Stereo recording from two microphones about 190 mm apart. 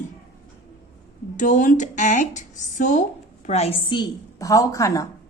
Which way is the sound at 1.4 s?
40° left (ahead or behind).